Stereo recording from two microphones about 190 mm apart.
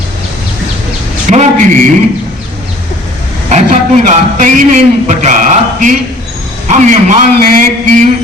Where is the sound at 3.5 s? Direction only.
40° right (ahead or behind).